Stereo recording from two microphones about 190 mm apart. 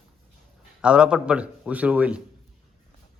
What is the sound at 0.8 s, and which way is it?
A man's voice, 5° right (ahead or behind).